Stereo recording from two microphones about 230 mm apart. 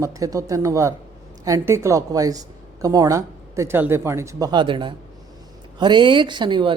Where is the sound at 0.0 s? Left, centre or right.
Centre.